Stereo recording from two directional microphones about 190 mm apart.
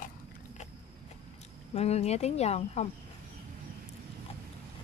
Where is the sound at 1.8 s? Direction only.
35° left (ahead or behind).